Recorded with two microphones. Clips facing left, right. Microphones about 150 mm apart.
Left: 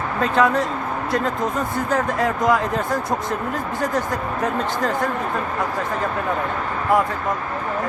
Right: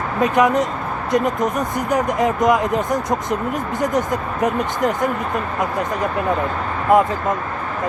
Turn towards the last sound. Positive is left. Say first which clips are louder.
# right 4 dB
turn(degrees=-20)  # may be behind; listen again after turning